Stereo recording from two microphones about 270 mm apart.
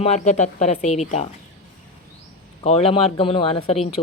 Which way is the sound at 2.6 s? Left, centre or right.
Left.